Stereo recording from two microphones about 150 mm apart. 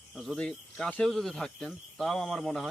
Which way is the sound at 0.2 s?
5° left (ahead or behind).